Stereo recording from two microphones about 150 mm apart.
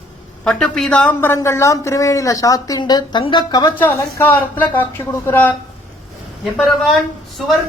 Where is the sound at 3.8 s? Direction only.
15° left (ahead or behind).